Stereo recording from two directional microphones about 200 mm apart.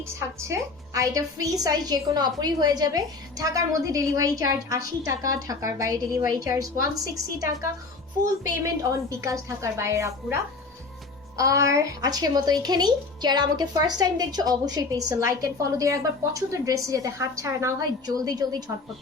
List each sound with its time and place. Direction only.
0.0 s a woman's voice: 15° right (ahead or behind)
9.0 s a woman's voice: 15° right (ahead or behind)
11.3 s speech: 15° right (ahead or behind)